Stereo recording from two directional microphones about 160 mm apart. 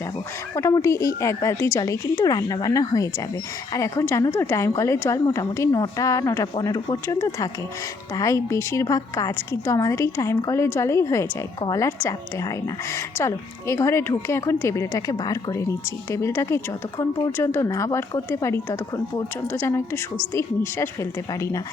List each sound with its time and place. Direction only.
0.5 s a woman's voice: 20° left (ahead or behind)
13.1 s a woman's voice: 15° left (ahead or behind)